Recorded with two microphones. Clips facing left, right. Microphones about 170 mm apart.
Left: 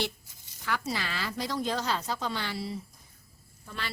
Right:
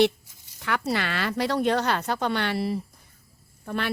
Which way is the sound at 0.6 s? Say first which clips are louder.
Right 6 dB; 65° right (ahead or behind).